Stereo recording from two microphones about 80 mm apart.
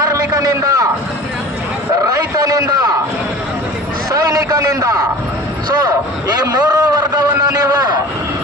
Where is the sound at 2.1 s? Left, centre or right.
Right.